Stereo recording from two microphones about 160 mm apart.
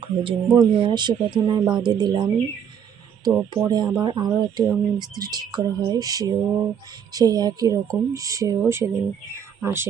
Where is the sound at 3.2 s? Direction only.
25° right (ahead or behind).